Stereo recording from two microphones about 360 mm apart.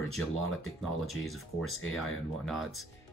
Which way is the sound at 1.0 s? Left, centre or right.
Centre.